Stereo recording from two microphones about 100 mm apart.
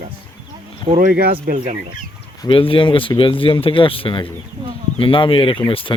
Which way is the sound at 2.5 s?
60° left (ahead or behind).